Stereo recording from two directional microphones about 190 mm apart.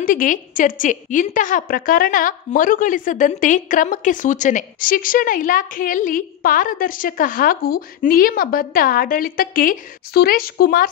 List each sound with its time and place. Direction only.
0.0 s a woman's voice: 45° left (ahead or behind)